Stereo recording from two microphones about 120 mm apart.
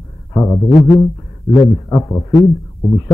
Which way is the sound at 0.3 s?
25° left (ahead or behind).